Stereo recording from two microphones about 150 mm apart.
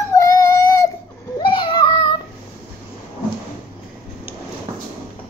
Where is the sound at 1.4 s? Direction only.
30° left (ahead or behind).